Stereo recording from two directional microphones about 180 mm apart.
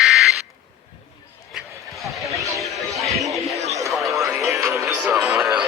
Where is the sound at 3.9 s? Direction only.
Centre (ahead or behind).